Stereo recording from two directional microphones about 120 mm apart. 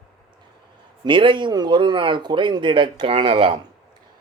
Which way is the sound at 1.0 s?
45° right (ahead or behind).